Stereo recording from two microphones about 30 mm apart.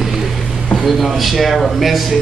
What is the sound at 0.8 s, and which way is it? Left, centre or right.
A man's voice, centre.